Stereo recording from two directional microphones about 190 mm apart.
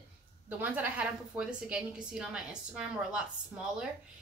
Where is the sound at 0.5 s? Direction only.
10° right (ahead or behind).